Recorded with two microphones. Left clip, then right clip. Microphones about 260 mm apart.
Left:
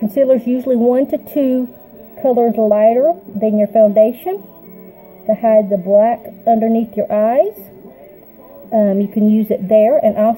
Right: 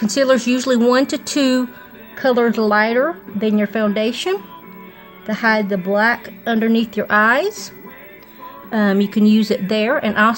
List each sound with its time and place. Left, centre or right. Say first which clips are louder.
0.1 s a woman's voice: left 2 dB; right
8.6 s a woman's voice: left 4 dB; right